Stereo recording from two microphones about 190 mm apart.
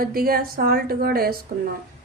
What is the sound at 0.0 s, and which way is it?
A woman's voice, 50° right (ahead or behind).